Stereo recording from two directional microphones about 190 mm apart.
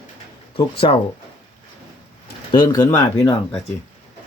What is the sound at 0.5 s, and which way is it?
Speech, 30° left (ahead or behind).